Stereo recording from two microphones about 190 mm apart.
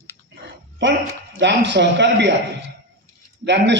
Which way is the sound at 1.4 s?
70° right (ahead or behind).